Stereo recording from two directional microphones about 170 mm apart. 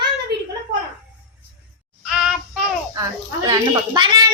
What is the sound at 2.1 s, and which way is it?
Child singing, 5° right (ahead or behind).